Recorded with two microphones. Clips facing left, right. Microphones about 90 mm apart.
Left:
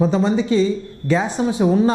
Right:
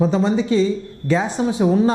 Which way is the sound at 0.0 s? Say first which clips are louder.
Even; 20° left (ahead or behind).